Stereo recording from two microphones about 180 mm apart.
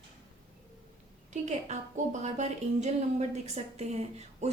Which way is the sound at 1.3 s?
40° right (ahead or behind).